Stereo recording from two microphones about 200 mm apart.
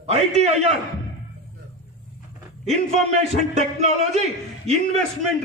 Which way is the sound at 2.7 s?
35° right (ahead or behind).